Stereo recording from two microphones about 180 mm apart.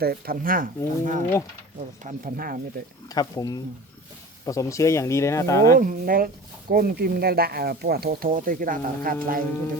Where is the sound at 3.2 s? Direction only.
20° left (ahead or behind).